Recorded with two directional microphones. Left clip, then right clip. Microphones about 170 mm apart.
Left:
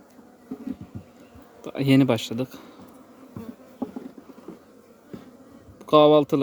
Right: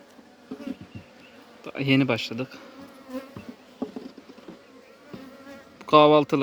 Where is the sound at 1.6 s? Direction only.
35° left (ahead or behind).